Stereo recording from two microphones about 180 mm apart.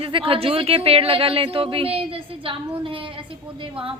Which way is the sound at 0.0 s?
30° right (ahead or behind).